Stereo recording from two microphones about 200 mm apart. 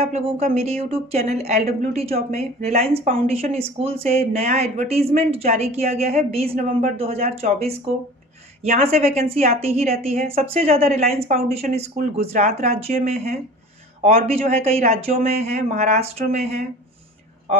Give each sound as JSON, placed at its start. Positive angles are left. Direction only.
{"t": 0.0, "sound": "speech", "side_deg": -30}
{"t": 14.4, "sound": "speech", "side_deg": -30}